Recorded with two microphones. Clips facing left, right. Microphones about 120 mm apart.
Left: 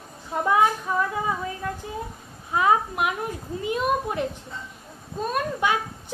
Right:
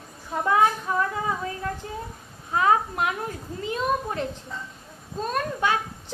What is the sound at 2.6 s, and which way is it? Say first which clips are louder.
Speech: even; 15° left (ahead or behind).